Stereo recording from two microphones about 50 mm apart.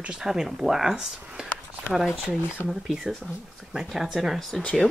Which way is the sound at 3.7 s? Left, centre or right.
Centre.